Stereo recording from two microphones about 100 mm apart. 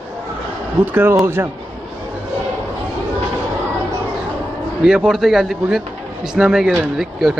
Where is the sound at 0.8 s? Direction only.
20° right (ahead or behind).